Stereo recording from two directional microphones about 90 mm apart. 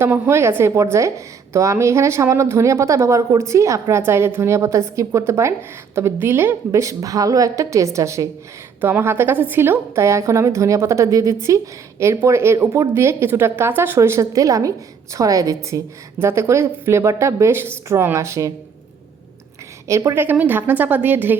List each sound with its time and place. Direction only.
0.0 s a woman's voice: 30° right (ahead or behind)
19.9 s a woman's voice: 30° right (ahead or behind)
20.4 s a woman's voice: 20° right (ahead or behind)